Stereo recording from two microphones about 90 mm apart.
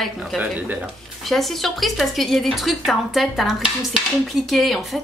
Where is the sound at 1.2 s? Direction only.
Centre (ahead or behind).